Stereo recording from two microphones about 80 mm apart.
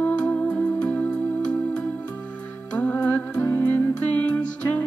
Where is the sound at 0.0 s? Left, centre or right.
Centre.